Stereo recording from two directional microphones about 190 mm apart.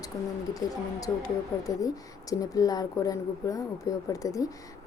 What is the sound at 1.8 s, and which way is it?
Speech, 20° left (ahead or behind).